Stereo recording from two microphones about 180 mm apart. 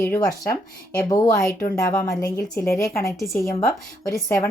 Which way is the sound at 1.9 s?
10° left (ahead or behind).